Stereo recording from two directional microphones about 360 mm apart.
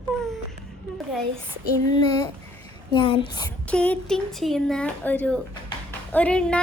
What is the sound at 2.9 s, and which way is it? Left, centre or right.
A woman's voice, centre.